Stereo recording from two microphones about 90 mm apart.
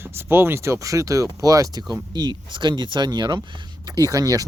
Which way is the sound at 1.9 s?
50° right (ahead or behind).